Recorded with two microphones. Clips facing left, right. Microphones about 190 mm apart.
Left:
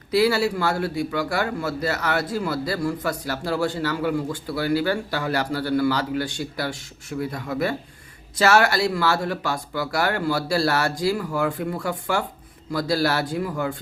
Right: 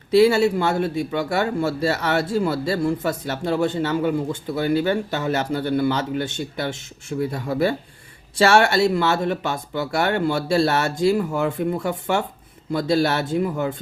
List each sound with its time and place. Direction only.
0.1 s speech: 25° right (ahead or behind)